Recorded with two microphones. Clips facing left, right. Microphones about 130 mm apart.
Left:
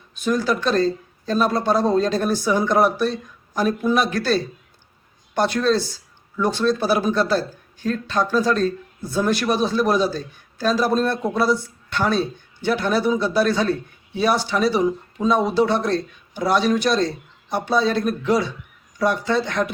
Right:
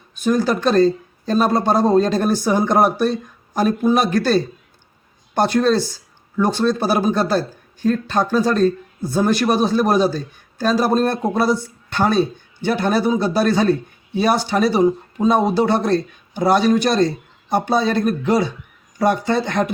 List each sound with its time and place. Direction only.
0.2 s speech: 45° right (ahead or behind)